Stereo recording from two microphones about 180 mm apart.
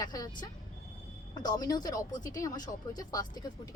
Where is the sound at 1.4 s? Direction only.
20° left (ahead or behind).